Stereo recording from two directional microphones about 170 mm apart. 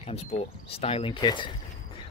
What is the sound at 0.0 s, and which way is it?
Speech, 35° left (ahead or behind).